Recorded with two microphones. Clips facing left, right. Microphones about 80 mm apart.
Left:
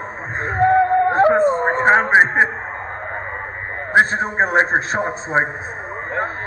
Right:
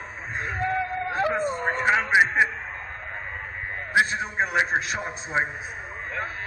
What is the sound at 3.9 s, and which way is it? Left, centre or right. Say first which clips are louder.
A man's voice: left 7 dB; left.